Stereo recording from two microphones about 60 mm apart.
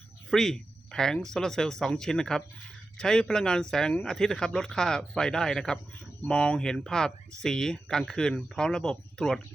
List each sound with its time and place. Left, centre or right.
0.3 s speech: centre